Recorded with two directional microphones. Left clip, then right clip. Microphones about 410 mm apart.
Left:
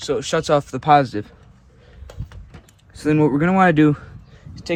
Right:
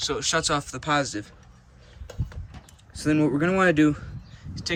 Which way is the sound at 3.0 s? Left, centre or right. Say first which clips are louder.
Left 5 dB; centre.